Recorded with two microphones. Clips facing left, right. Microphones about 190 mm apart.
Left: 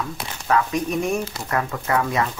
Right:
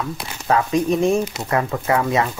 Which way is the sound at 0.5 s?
30° right (ahead or behind).